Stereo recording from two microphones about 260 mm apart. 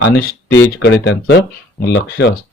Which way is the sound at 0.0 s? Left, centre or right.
Left.